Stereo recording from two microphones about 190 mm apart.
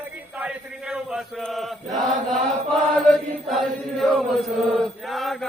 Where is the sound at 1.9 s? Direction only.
40° right (ahead or behind).